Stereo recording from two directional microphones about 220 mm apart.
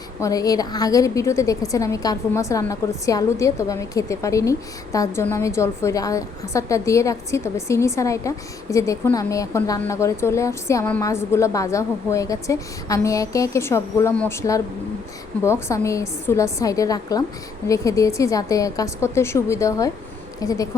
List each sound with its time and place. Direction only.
0.2 s a woman's voice: 15° left (ahead or behind)